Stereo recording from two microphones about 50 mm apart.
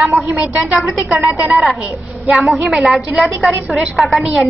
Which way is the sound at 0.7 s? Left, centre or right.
Right.